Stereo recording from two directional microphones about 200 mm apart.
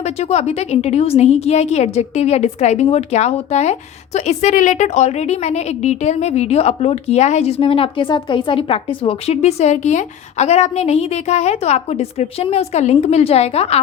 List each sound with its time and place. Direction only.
0.0 s a woman's voice: 35° left (ahead or behind)